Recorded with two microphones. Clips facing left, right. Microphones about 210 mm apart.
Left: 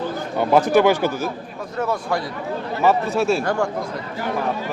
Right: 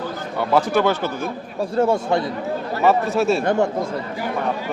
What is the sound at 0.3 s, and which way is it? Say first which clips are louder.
Speech: left 3 dB; 15° left (ahead or behind).